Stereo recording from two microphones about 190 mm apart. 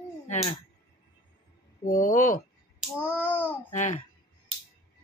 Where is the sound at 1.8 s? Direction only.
40° left (ahead or behind).